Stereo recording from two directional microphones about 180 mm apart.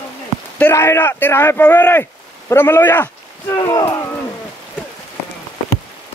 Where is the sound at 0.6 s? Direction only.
15° left (ahead or behind).